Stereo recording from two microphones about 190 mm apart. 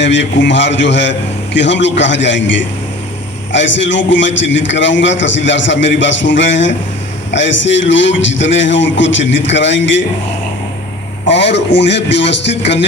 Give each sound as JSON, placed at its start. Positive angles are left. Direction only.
{"t": 0.0, "sound": "a man's voice", "side_deg": 70}
{"t": 11.3, "sound": "a man's voice", "side_deg": 65}